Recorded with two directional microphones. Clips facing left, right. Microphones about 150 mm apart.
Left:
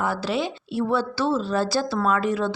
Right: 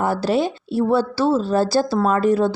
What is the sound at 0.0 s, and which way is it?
A woman's voice, 40° right (ahead or behind).